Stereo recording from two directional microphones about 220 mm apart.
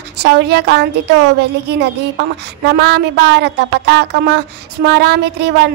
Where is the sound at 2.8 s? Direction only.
50° right (ahead or behind).